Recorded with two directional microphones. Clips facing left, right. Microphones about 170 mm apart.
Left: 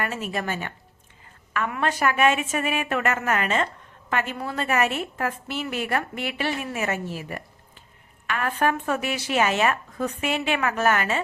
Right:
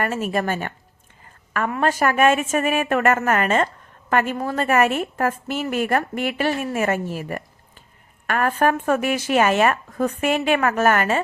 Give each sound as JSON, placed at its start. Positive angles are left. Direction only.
{"t": 0.0, "sound": "a woman's voice", "side_deg": -45}